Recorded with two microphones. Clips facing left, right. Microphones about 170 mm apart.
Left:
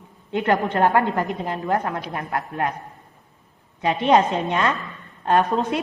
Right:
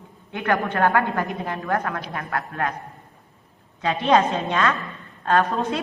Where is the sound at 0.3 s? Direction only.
20° left (ahead or behind).